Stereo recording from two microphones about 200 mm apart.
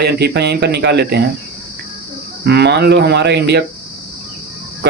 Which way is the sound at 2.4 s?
55° right (ahead or behind).